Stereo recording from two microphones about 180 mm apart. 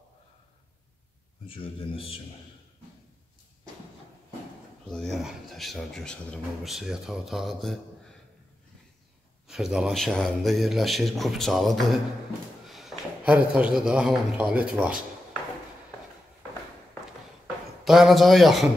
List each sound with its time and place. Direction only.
1.5 s a man's voice: 30° left (ahead or behind)
4.8 s speech: centre (ahead or behind)
9.5 s a man's voice: 5° right (ahead or behind)
17.8 s speech: centre (ahead or behind)